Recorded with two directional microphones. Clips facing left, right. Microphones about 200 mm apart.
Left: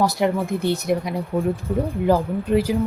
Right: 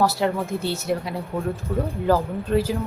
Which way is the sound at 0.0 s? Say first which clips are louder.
Left 2 dB; 15° left (ahead or behind).